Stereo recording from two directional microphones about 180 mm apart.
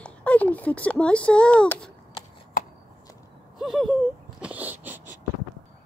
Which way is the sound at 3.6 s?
Centre (ahead or behind).